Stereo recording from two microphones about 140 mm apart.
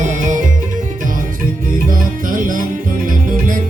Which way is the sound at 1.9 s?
75° right (ahead or behind).